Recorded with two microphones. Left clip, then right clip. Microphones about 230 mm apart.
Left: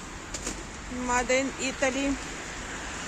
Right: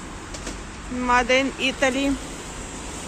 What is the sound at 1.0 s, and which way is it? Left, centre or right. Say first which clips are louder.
Speech: right 7 dB; centre.